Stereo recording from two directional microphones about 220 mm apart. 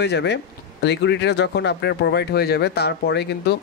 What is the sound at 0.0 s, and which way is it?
Speech, 50° left (ahead or behind).